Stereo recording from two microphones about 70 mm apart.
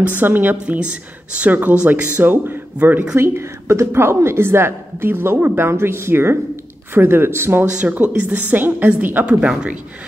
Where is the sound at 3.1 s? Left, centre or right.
Right.